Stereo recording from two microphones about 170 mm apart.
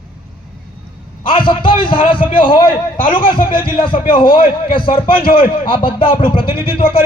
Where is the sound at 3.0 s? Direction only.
55° left (ahead or behind).